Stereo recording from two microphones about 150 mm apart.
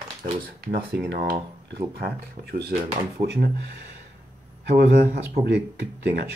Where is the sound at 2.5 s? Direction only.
90° right.